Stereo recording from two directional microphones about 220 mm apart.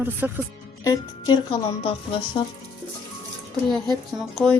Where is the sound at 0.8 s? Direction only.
20° left (ahead or behind).